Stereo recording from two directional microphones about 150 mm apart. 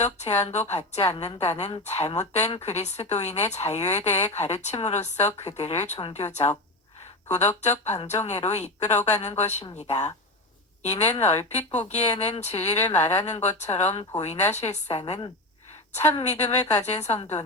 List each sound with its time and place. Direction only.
0.0 s speech: 50° left (ahead or behind)
10.8 s speech: 45° left (ahead or behind)
16.2 s speech: 50° left (ahead or behind)